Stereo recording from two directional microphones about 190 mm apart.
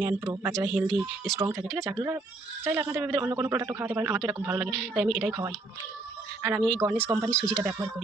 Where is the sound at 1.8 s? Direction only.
15° right (ahead or behind).